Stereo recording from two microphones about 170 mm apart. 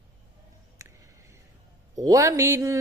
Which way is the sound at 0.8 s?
15° right (ahead or behind).